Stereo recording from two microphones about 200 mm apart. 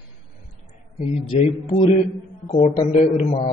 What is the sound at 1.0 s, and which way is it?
A man's voice, 35° left (ahead or behind).